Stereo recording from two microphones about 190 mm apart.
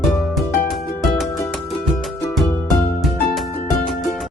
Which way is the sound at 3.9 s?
Centre (ahead or behind).